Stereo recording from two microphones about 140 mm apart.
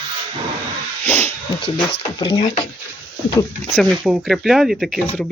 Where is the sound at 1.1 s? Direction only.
15° left (ahead or behind).